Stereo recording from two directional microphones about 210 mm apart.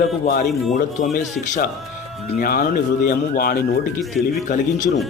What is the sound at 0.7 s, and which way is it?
Speech, 40° left (ahead or behind).